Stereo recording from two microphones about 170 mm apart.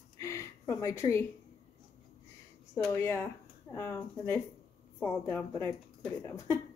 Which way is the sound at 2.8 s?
15° left (ahead or behind).